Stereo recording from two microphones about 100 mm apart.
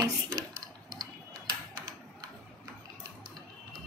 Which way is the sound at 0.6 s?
40° right (ahead or behind).